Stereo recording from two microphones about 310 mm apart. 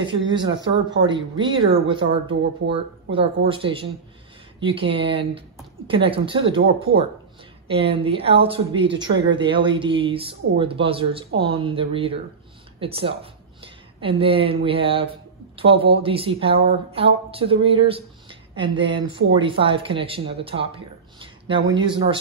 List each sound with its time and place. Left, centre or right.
0.5 s speech: right
1.0 s speech: centre
7.7 s speech: centre